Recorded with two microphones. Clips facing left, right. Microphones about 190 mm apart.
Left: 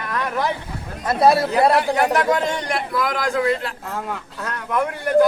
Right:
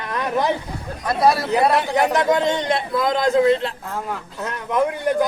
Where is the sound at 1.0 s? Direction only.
25° left (ahead or behind).